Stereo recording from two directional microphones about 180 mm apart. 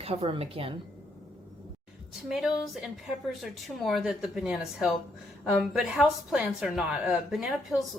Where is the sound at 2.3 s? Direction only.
Centre (ahead or behind).